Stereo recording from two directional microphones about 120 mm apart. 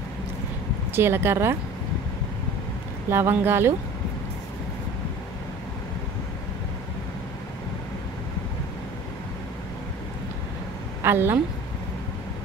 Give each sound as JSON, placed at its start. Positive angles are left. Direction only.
{"t": 0.9, "sound": "speech", "side_deg": -20}
{"t": 3.1, "sound": "speech", "side_deg": -20}
{"t": 11.0, "sound": "a woman's voice", "side_deg": -20}